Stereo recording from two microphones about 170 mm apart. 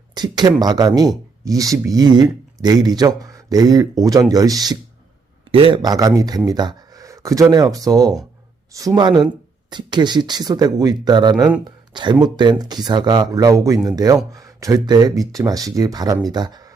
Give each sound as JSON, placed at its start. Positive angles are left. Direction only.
{"t": 0.1, "sound": "speech", "side_deg": -25}